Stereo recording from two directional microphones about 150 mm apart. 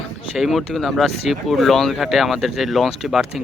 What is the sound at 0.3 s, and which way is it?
Speech, centre (ahead or behind).